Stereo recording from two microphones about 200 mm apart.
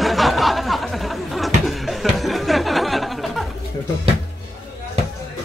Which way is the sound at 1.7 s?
Centre (ahead or behind).